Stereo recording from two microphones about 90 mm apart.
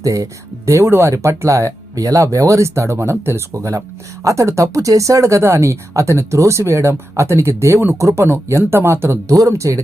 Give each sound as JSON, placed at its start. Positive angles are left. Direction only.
{"t": 0.0, "sound": "speech", "side_deg": -40}